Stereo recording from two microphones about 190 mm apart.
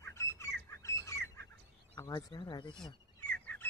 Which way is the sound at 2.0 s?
20° left (ahead or behind).